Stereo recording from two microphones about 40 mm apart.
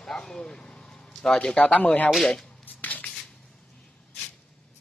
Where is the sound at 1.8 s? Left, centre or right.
Left.